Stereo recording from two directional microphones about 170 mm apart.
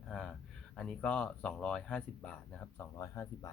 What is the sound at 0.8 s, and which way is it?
Speech, 5° left (ahead or behind).